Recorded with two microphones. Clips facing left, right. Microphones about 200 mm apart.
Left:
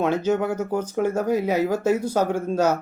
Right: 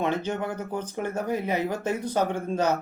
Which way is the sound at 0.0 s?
10° left (ahead or behind).